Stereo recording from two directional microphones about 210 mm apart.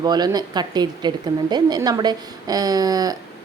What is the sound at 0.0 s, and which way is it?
Speech, 20° right (ahead or behind).